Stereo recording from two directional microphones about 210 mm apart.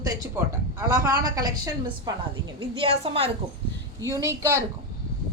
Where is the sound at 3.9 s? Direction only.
15° right (ahead or behind).